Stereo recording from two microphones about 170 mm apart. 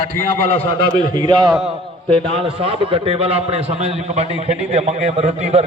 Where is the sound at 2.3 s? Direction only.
35° right (ahead or behind).